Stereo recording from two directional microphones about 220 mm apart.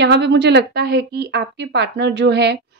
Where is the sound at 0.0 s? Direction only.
50° right (ahead or behind).